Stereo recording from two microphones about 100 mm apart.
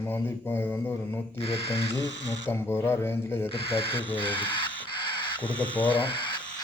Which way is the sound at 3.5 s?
65° left (ahead or behind).